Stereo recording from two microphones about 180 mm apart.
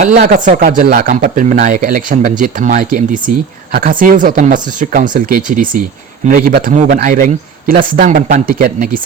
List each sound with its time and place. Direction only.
0.0 s a man's voice: 55° right (ahead or behind)